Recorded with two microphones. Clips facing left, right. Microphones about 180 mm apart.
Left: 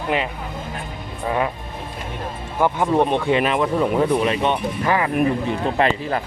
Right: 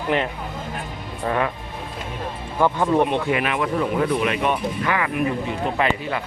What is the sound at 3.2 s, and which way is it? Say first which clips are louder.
Speech: left 4 dB; 30° left (ahead or behind).